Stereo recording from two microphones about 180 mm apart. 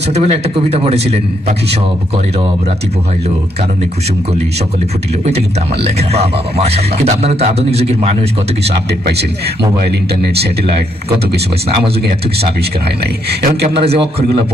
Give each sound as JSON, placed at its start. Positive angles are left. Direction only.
{"t": 0.1, "sound": "a man's voice", "side_deg": -35}
{"t": 5.2, "sound": "a man's voice", "side_deg": -35}
{"t": 8.9, "sound": "a man's voice", "side_deg": -65}
{"t": 13.7, "sound": "a man's voice", "side_deg": -30}